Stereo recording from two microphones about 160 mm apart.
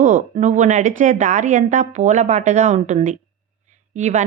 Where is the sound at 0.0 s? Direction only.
55° right (ahead or behind).